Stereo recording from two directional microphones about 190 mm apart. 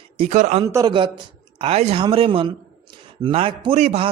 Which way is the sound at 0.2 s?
40° right (ahead or behind).